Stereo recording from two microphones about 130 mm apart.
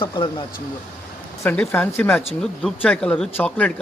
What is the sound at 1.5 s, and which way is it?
Speech, 15° left (ahead or behind).